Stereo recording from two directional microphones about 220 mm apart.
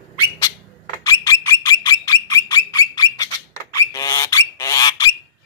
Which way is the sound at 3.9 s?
15° left (ahead or behind).